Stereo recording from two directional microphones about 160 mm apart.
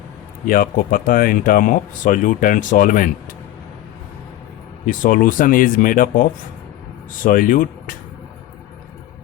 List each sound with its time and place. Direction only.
0.4 s speech: 60° left (ahead or behind)
4.9 s speech: 60° left (ahead or behind)
7.3 s speech: 60° left (ahead or behind)